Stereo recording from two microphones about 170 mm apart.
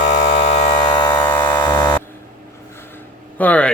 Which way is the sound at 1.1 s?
10° left (ahead or behind).